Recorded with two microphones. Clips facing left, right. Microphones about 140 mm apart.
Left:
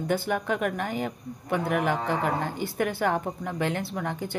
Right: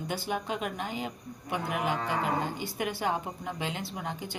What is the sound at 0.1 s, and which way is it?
Speech, 55° left (ahead or behind).